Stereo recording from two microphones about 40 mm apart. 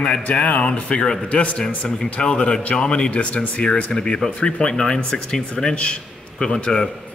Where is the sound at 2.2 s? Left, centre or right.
Left.